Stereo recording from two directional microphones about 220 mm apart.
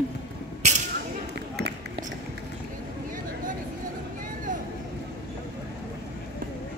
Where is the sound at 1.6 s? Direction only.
50° right (ahead or behind).